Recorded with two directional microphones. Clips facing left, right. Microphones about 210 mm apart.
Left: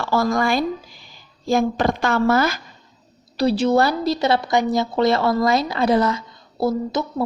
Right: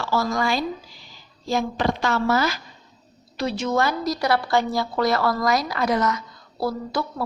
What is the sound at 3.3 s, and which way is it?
A woman's voice, 35° left (ahead or behind).